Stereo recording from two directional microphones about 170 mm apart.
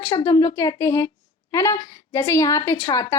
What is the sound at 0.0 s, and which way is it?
A woman's voice, 25° left (ahead or behind).